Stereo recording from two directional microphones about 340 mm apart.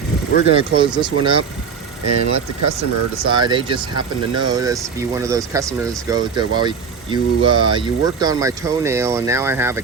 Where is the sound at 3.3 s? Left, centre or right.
Centre.